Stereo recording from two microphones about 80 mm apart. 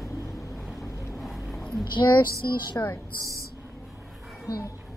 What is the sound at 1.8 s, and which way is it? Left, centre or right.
A woman's voice, left.